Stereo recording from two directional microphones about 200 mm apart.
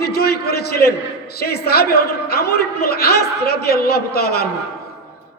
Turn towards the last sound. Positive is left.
turn(degrees=50)  # may be behind; listen again after turning